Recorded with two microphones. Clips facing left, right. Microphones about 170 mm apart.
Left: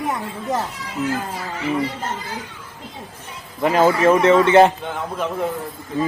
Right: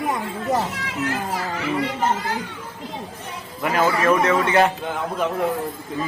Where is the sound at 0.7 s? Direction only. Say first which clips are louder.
Left 2 dB; 85° right.